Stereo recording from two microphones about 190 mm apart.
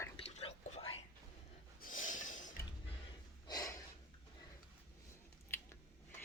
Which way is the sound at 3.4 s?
20° left (ahead or behind).